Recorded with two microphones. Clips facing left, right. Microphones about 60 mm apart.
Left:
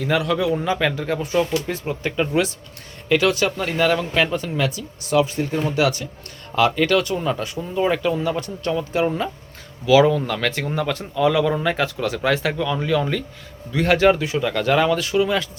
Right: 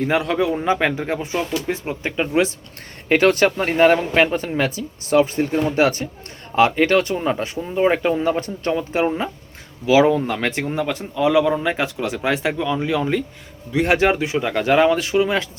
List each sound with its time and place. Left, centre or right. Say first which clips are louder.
0.0 s speech: right 1 dB; right
3.1 s speech: right 3 dB; right